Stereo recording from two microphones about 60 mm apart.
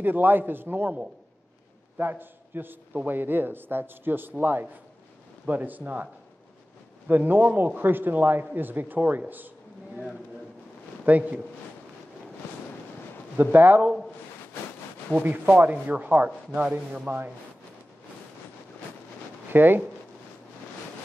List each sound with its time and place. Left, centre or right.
0.0 s speech: right
2.0 s a man's voice: right
7.1 s speech: right
11.1 s speech: right
13.4 s speech: right
15.1 s speech: right
19.5 s speech: right